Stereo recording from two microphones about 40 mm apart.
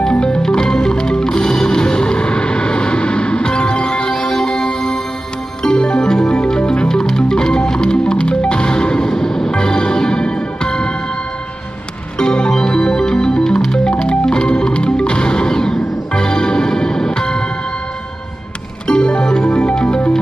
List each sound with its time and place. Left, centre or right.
0.1 s music: left
12.2 s music: left
18.9 s music: left